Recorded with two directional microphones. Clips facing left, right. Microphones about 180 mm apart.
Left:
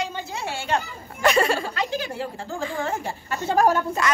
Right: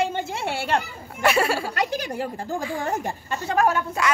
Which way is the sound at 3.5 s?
35° left (ahead or behind).